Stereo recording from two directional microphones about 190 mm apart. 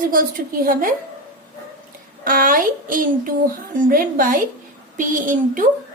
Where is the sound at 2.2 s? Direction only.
45° right (ahead or behind).